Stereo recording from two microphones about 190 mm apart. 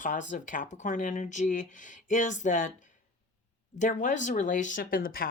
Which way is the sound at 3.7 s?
40° left (ahead or behind).